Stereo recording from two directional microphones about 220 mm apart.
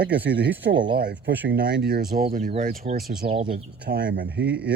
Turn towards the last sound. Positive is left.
turn(degrees=-45)  # may be behind; listen again after turning